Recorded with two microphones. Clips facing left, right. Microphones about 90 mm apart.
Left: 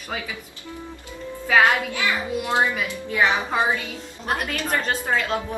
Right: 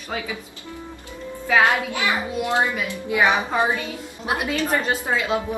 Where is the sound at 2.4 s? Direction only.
20° left (ahead or behind).